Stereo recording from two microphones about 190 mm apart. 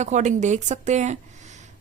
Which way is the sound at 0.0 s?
40° right (ahead or behind).